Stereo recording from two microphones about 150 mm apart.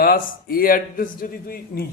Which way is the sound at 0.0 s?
85° left.